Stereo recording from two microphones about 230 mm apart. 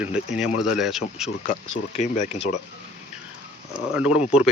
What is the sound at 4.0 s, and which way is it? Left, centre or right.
Speech, centre.